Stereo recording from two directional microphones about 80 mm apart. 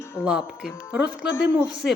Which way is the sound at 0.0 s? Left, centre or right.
Left.